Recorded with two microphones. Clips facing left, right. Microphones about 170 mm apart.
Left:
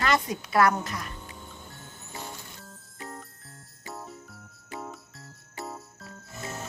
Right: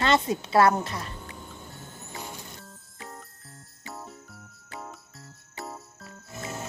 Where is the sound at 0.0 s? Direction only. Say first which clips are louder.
Right 3 dB; 25° right (ahead or behind).